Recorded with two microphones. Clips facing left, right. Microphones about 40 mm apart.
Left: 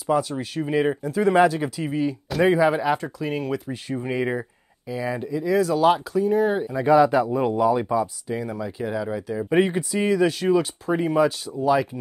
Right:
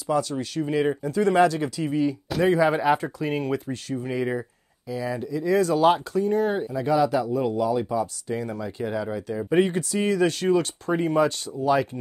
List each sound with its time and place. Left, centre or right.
0.1 s speech: centre
2.7 s speech: centre
3.9 s speech: left
5.4 s speech: centre
6.7 s speech: left
7.9 s speech: centre
9.5 s speech: centre